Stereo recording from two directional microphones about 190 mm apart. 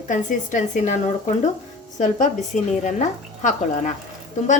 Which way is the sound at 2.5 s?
40° left (ahead or behind).